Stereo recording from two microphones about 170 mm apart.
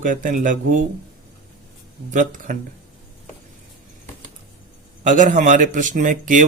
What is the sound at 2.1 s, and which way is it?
Speech, 50° right (ahead or behind).